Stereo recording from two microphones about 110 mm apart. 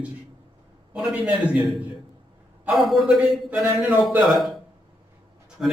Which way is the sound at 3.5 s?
15° right (ahead or behind).